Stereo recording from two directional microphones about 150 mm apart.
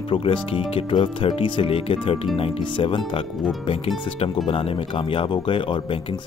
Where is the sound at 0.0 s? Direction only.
35° left (ahead or behind).